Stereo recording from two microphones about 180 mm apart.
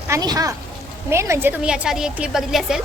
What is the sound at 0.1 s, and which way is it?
A woman's voice, 20° right (ahead or behind).